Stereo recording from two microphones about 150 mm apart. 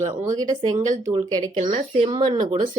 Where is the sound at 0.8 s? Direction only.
55° right (ahead or behind).